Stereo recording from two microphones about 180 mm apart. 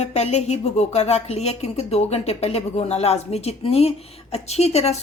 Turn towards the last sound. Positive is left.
turn(degrees=35)  # may be behind; listen again after turning